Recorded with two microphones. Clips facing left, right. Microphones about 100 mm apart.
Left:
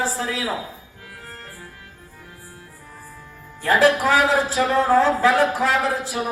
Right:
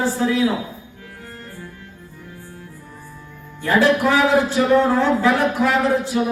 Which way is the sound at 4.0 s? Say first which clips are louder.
Right 2 dB; 35° left (ahead or behind).